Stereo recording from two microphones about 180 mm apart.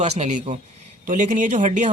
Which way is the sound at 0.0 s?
40° right (ahead or behind).